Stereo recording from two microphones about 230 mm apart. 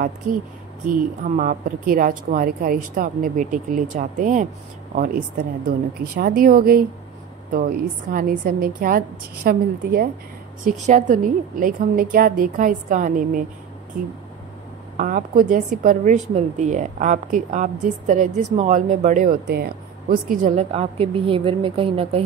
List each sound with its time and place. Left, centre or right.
0.8 s a woman's voice: right
15.0 s a woman's voice: right